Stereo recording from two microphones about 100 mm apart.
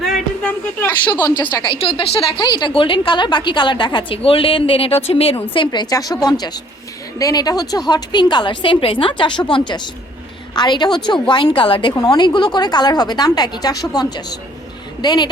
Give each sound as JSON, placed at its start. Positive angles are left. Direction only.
{"t": 1.1, "sound": "a woman's voice", "side_deg": 45}
{"t": 1.8, "sound": "a woman's voice", "side_deg": 65}
{"t": 5.7, "sound": "a woman's voice", "side_deg": 40}
{"t": 11.9, "sound": "a woman's voice", "side_deg": 45}